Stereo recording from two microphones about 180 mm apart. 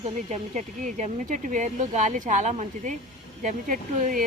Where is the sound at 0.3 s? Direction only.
40° right (ahead or behind).